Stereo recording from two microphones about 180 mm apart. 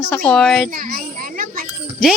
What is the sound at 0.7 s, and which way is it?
Children playing, 50° right (ahead or behind).